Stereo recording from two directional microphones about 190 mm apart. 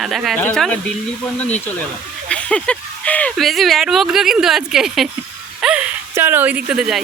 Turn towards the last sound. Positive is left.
turn(degrees=-5)  # may be behind; listen again after turning